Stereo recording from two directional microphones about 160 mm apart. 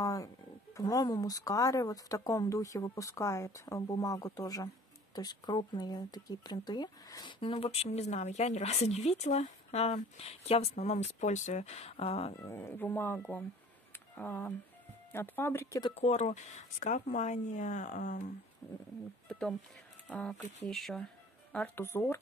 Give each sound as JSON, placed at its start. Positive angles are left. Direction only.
{"t": 0.0, "sound": "a sound", "side_deg": 20}
{"t": 0.7, "sound": "speech", "side_deg": 20}
{"t": 12.4, "sound": "speech", "side_deg": 15}
{"t": 15.9, "sound": "speech", "side_deg": 45}
{"t": 18.6, "sound": "speech", "side_deg": 15}
{"t": 20.1, "sound": "speech", "side_deg": 10}